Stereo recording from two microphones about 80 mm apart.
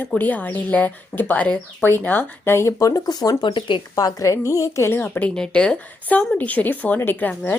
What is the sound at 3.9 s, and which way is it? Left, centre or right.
Speech, left.